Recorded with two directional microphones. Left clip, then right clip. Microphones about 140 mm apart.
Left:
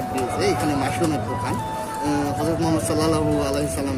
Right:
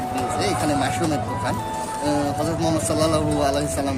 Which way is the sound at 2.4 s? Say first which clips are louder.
Even; 25° right (ahead or behind).